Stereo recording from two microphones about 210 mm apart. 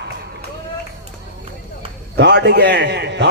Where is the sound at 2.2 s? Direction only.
55° right (ahead or behind).